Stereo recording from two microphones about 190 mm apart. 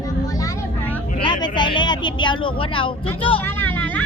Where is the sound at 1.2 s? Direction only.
25° left (ahead or behind).